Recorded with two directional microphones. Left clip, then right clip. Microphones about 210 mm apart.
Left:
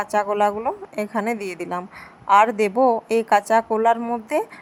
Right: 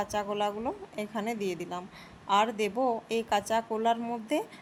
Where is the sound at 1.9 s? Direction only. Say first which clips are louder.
Left 11 dB; 20° left (ahead or behind).